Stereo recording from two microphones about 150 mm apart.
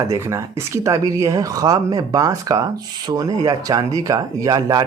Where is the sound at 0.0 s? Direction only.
20° right (ahead or behind).